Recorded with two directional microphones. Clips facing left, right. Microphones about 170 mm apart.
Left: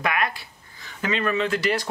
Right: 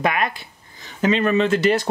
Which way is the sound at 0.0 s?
25° right (ahead or behind).